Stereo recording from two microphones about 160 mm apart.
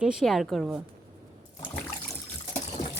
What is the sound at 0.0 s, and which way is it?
Speech, 5° right (ahead or behind).